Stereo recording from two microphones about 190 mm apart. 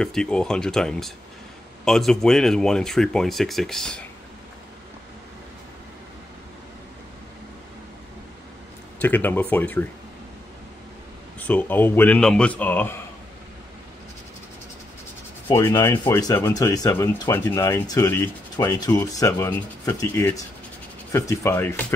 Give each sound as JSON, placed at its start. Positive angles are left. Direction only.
{"t": 0.0, "sound": "speech", "side_deg": 5}
{"t": 9.0, "sound": "speech", "side_deg": 10}
{"t": 11.3, "sound": "speech", "side_deg": 10}
{"t": 15.4, "sound": "speech", "side_deg": 20}